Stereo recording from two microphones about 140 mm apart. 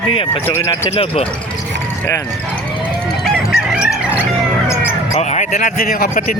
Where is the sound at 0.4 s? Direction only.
20° left (ahead or behind).